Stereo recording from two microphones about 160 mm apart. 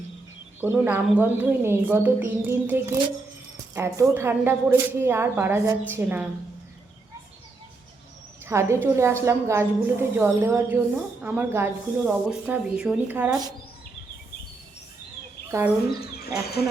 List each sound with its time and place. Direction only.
0.6 s speech: 10° right (ahead or behind)
8.4 s speech: 15° right (ahead or behind)
15.4 s speech: 15° right (ahead or behind)
16.0 s speech: 75° left (ahead or behind)